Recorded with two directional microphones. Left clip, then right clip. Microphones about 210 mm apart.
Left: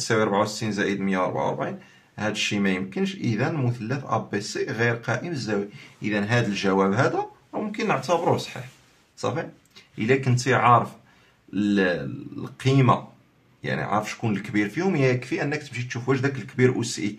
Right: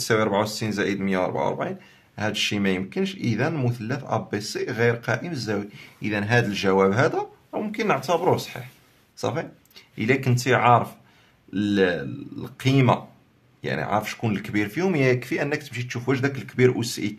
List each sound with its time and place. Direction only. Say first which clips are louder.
0.0 s speech: even; 45° right (ahead or behind)